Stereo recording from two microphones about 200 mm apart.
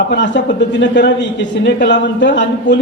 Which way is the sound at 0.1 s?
60° left (ahead or behind).